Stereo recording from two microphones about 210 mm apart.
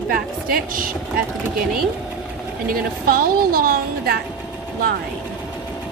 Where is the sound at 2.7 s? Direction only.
45° right (ahead or behind).